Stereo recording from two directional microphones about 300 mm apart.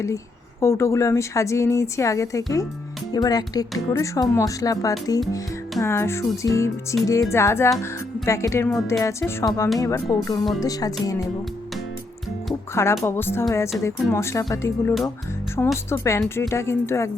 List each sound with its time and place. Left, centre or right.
0.6 s speech: centre
12.5 s speech: centre